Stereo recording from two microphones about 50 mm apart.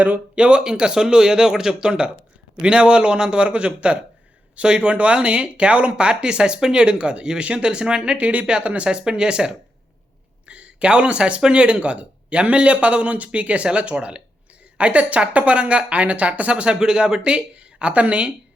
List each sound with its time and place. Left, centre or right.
0.0 s speech: right